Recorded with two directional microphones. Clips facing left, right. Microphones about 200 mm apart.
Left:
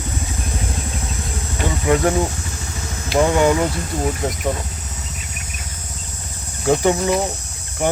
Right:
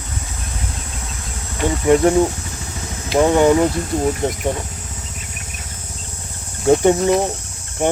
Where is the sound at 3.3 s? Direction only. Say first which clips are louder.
Right 5 dB; 25° right (ahead or behind).